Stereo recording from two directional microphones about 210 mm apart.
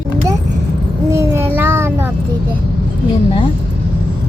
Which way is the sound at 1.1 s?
15° right (ahead or behind).